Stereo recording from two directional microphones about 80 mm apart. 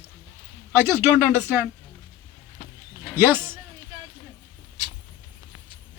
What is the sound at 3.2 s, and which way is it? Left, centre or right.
Speech, right.